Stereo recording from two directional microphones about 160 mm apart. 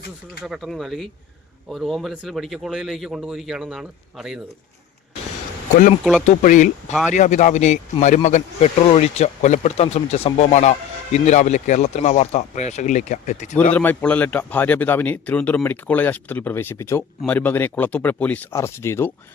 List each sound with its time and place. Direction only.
0.4 s speech: centre (ahead or behind)
6.2 s speech: 50° left (ahead or behind)
13.7 s a man's voice: 10° left (ahead or behind)